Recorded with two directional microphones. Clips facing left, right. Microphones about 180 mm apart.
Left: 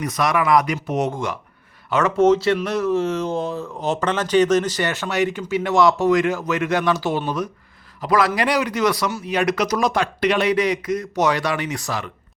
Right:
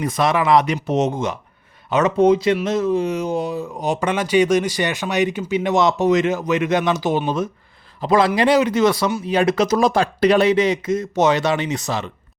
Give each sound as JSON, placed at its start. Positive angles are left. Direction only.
{"t": 0.0, "sound": "speech", "side_deg": -25}